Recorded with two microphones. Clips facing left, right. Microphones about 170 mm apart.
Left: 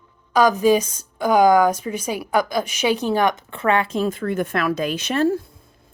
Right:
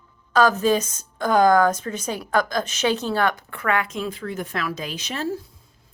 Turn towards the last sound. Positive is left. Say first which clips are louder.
# left 8 dB
turn(degrees=55)  # may be behind; listen again after turning